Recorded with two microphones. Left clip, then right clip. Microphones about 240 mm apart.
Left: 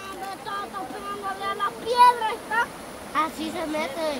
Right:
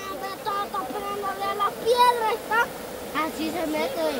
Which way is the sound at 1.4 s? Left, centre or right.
Right.